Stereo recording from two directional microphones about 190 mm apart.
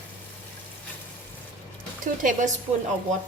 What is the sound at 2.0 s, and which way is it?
Speech, 45° right (ahead or behind).